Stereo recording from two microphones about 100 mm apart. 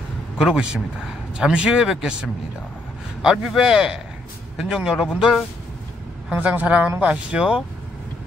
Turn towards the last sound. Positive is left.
turn(degrees=-10)  # may be behind; listen again after turning